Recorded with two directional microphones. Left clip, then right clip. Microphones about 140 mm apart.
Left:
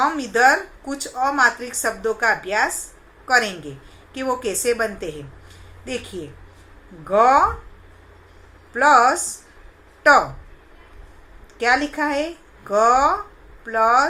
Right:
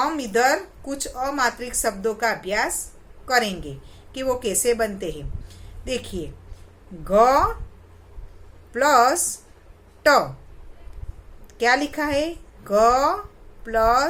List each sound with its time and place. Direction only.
0.0 s a woman's voice: 25° right (ahead or behind)
8.7 s a woman's voice: 35° right (ahead or behind)
11.5 s a woman's voice: 30° right (ahead or behind)